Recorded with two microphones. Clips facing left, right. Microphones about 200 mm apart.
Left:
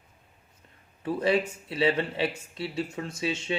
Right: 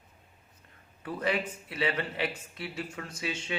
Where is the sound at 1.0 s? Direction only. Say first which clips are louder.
Left 6 dB; 25° left (ahead or behind).